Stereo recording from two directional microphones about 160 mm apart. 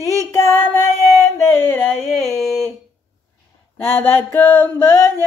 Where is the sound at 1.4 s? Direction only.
15° left (ahead or behind).